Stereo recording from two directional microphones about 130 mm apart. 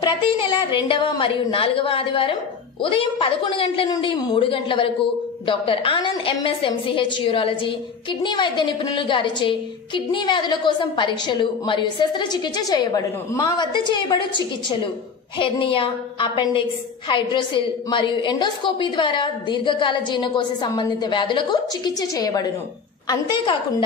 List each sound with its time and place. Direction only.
0.0 s a woman's voice: 40° left (ahead or behind)
15.3 s a woman's voice: 40° left (ahead or behind)